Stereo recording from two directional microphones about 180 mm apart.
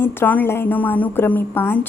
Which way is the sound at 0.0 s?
10° left (ahead or behind).